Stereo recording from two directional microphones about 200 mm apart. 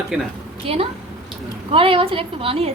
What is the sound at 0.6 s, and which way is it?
A woman's voice, 30° right (ahead or behind).